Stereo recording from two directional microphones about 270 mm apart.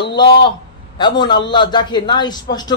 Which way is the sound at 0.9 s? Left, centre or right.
Centre.